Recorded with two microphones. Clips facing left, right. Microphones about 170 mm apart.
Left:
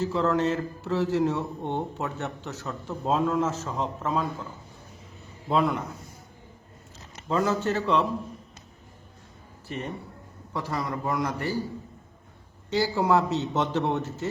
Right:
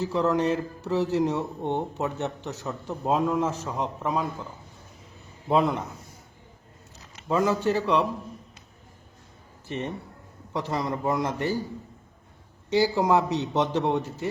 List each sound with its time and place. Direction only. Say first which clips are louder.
0.0 s a man's voice: right 1 dB; 15° right (ahead or behind)
5.5 s a man's voice: right 2 dB; 20° right (ahead or behind)
7.3 s a man's voice: right 2 dB; 15° right (ahead or behind)
9.6 s a man's voice: right 2 dB; 20° right (ahead or behind)
12.7 s a man's voice: right 2 dB; 15° right (ahead or behind)